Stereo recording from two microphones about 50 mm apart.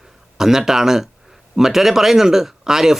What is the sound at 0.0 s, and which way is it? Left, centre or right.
Speech, centre.